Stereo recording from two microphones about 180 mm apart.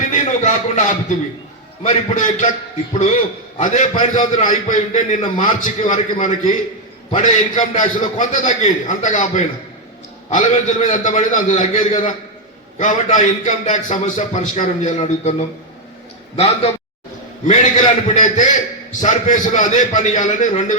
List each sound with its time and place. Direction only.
0.1 s a man's voice: 45° left (ahead or behind)
3.6 s a man's voice: 40° left (ahead or behind)
7.1 s a man's voice: 35° left (ahead or behind)
7.8 s a man's voice: 45° left (ahead or behind)